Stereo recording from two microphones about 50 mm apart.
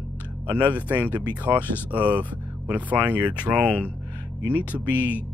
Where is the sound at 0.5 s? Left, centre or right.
Right.